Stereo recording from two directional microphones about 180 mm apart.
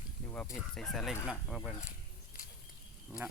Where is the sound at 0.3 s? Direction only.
10° left (ahead or behind).